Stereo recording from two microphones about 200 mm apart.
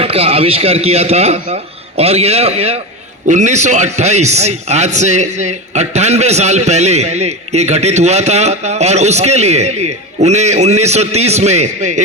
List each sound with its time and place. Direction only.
0.0 s a man's voice: 30° right (ahead or behind)